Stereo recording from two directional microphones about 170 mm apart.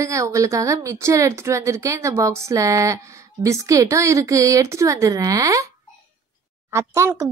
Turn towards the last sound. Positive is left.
turn(degrees=-15)  # may be behind; listen again after turning